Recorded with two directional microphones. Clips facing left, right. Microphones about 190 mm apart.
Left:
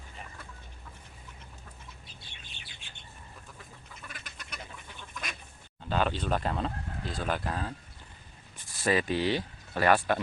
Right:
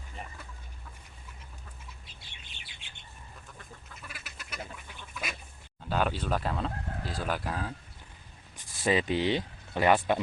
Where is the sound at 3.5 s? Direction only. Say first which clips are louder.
Right 1 dB; 5° right (ahead or behind).